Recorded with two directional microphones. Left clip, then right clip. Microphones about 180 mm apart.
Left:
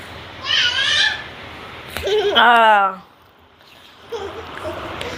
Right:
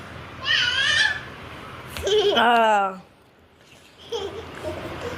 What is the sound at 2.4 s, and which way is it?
Speech, 25° right (ahead or behind).